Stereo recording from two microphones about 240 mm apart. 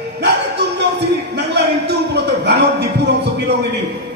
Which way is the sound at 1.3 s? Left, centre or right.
Right.